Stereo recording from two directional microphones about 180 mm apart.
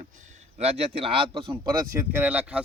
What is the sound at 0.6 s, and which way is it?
Speech, 35° right (ahead or behind).